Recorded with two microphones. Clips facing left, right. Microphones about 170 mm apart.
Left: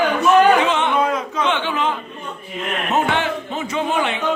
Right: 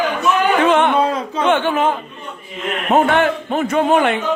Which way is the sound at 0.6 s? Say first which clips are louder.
Right 6 dB; 55° right (ahead or behind).